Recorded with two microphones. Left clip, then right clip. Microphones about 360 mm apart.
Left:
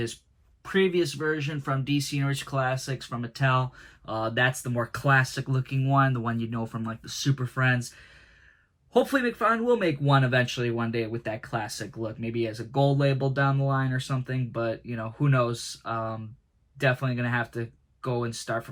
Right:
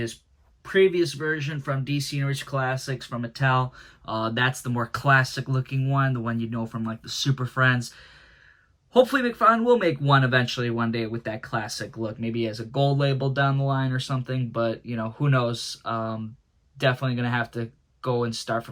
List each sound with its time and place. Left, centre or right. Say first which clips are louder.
0.6 s speech: right 4 dB; centre
8.9 s speech: right 4 dB; centre